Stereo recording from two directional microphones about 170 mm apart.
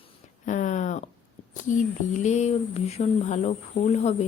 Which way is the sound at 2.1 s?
45° left (ahead or behind).